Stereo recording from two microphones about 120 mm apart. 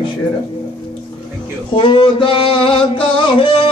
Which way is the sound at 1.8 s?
40° left (ahead or behind).